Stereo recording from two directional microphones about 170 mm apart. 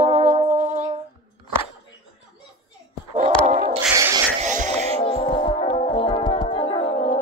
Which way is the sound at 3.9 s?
20° right (ahead or behind).